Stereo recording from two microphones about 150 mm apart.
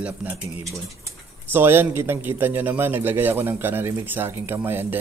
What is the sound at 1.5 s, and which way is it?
A man's voice, 15° right (ahead or behind).